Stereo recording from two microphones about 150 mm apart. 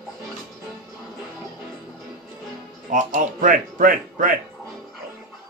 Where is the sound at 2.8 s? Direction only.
60° right (ahead or behind).